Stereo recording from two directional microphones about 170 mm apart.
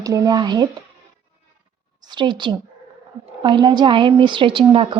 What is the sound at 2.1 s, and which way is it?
A woman's voice, 25° right (ahead or behind).